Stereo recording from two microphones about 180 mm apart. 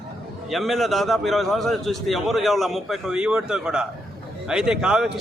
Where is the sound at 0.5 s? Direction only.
Centre (ahead or behind).